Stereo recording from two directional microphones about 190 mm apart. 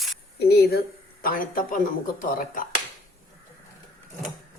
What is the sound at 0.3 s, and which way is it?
Speech, 60° left (ahead or behind).